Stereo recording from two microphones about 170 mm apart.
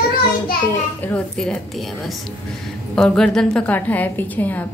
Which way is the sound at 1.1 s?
5° left (ahead or behind).